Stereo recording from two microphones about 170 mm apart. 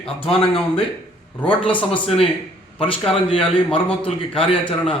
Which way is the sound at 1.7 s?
10° left (ahead or behind).